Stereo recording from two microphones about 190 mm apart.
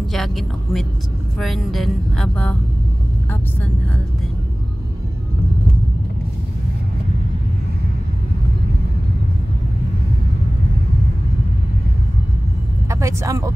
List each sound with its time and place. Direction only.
0.1 s speech: centre (ahead or behind)
1.4 s music: centre (ahead or behind)
12.9 s speech: 15° right (ahead or behind)